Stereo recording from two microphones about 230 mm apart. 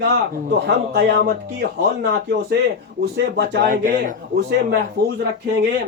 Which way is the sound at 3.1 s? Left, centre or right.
Right.